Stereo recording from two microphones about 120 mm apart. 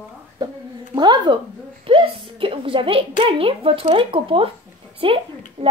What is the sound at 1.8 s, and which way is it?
A woman's voice, 45° right (ahead or behind).